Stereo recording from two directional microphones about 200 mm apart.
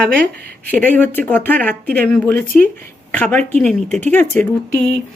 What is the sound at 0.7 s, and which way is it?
Speech, 10° left (ahead or behind).